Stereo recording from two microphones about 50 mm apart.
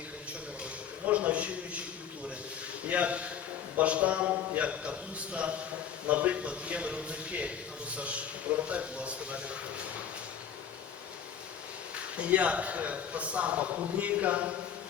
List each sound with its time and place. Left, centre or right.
1.0 s a man's voice: right
2.9 s a man's voice: right
12.1 s a man's voice: right